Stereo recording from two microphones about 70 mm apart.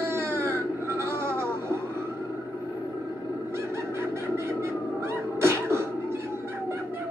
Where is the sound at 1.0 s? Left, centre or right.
Right.